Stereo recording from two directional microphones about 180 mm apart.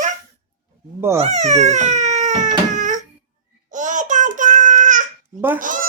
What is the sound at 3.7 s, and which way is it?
Child singing, 45° right (ahead or behind).